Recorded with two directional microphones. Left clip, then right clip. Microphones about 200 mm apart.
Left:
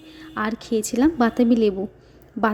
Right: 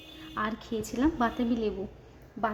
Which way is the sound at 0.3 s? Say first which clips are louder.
Left 8 dB; 30° left (ahead or behind).